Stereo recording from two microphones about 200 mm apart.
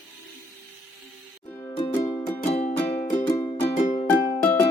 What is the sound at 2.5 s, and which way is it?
Music, 30° left (ahead or behind).